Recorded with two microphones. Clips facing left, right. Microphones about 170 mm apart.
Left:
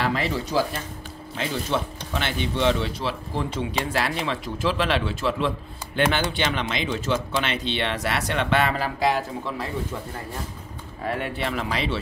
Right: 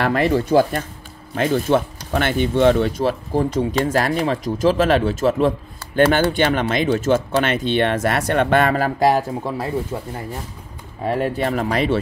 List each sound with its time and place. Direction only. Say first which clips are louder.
0.0 s speech: right 7 dB; 55° right (ahead or behind)
11.1 s speech: right 7 dB; 40° right (ahead or behind)